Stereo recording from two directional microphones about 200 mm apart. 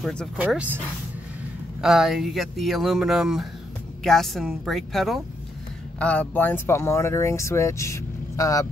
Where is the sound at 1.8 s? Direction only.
Centre (ahead or behind).